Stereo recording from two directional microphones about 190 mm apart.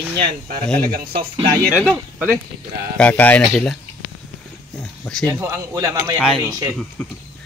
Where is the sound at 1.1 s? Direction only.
25° right (ahead or behind).